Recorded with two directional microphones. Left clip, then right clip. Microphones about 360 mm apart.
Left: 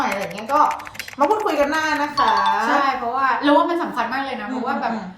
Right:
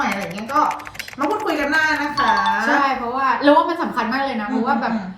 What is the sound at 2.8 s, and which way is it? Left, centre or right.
A woman's voice, centre.